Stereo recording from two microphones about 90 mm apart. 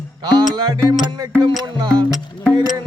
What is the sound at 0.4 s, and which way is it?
Music, 50° right (ahead or behind).